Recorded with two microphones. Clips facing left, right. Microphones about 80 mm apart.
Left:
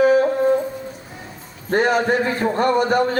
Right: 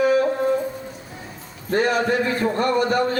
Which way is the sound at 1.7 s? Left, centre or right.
Left.